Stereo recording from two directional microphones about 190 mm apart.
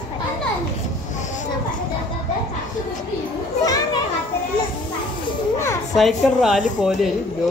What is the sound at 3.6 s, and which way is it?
Children playing, 20° left (ahead or behind).